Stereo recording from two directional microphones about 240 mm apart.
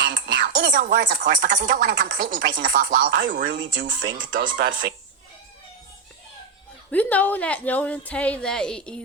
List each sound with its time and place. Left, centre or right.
0.0 s a sound: right
0.4 s speech: right
6.9 s a woman's voice: centre